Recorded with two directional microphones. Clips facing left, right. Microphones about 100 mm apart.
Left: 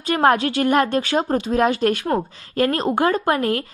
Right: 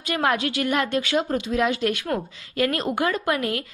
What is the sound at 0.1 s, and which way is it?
A woman's voice, 40° left (ahead or behind).